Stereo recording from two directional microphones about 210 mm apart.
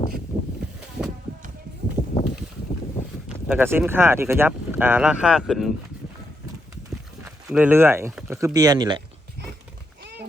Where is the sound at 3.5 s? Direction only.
10° right (ahead or behind).